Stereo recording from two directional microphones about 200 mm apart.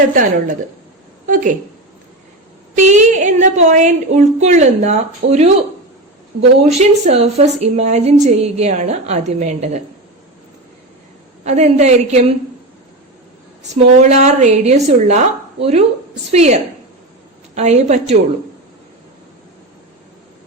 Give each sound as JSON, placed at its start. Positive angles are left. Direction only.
{"t": 0.1, "sound": "a woman's voice", "side_deg": -40}
{"t": 2.7, "sound": "a woman's voice", "side_deg": -35}
{"t": 6.6, "sound": "a woman's voice", "side_deg": -35}
{"t": 11.4, "sound": "a woman's voice", "side_deg": -35}
{"t": 14.1, "sound": "a woman's voice", "side_deg": -35}